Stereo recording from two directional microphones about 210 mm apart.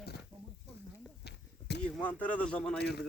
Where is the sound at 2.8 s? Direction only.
50° left (ahead or behind).